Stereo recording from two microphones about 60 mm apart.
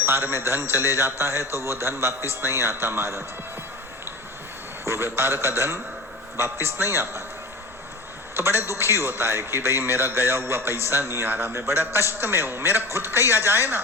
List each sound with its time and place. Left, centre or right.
0.0 s a man's voice: right
4.9 s a man's voice: right
8.4 s a man's voice: right